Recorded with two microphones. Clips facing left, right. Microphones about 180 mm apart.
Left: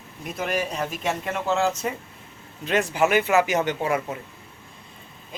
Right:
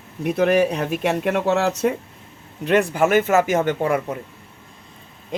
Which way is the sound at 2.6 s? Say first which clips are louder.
Right 4 dB; 60° right (ahead or behind).